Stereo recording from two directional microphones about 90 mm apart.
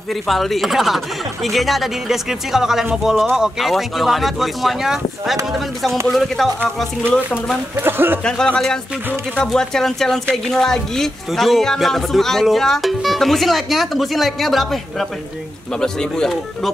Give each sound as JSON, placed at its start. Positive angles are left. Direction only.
{"t": 0.1, "sound": "a woman's voice", "side_deg": 0}
{"t": 7.8, "sound": "speech", "side_deg": -25}
{"t": 8.2, "sound": "a woman's voice", "side_deg": 10}